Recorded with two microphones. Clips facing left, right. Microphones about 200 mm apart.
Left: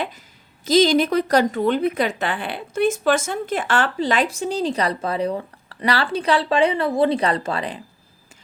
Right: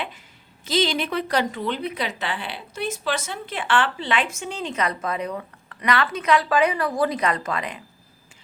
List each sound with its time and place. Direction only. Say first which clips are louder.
0.6 s a woman's voice: left 8 dB; 40° left (ahead or behind)